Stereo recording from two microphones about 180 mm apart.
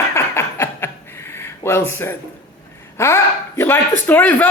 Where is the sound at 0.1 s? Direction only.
15° left (ahead or behind).